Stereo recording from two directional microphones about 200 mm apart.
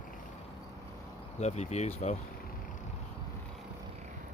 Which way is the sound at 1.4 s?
35° left (ahead or behind).